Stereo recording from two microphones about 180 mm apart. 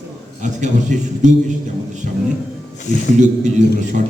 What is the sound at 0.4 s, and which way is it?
A man's voice, 40° right (ahead or behind).